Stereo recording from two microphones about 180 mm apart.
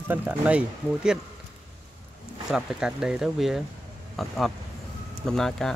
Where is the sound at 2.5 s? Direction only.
5° right (ahead or behind).